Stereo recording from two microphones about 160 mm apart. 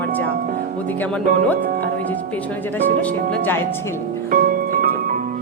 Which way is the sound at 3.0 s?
10° left (ahead or behind).